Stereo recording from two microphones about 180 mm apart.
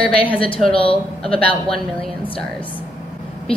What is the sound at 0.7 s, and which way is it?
Speech, 30° left (ahead or behind).